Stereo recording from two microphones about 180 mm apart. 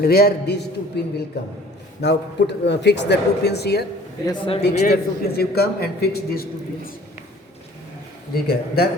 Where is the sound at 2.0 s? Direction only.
75° left (ahead or behind).